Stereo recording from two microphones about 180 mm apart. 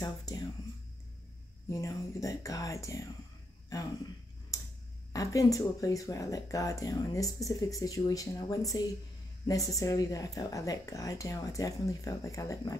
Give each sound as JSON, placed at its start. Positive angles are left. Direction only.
{"t": 0.0, "sound": "speech", "side_deg": 20}
{"t": 1.7, "sound": "speech", "side_deg": 15}
{"t": 4.5, "sound": "tick-tock", "side_deg": 15}
{"t": 5.1, "sound": "speech", "side_deg": 20}